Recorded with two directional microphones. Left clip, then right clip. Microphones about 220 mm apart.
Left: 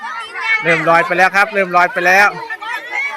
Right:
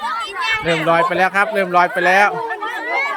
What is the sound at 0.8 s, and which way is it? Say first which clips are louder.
Speech: left 2 dB; centre (ahead or behind).